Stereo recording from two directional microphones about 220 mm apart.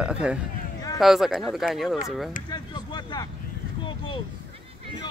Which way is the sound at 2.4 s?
20° left (ahead or behind).